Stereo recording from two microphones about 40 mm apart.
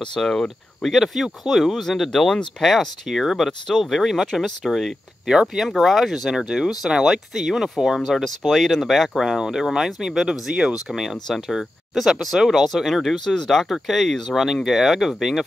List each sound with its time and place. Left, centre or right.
0.0 s speech: centre
0.8 s speech: centre
5.2 s speech: centre
5.8 s speech: centre
9.4 s speech: centre
10.5 s speech: right
10.9 s speech: centre
14.4 s speech: centre